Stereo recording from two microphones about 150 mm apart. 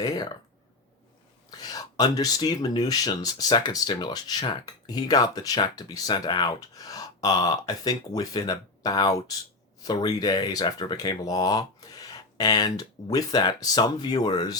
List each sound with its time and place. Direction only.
1.5 s speech: 25° left (ahead or behind)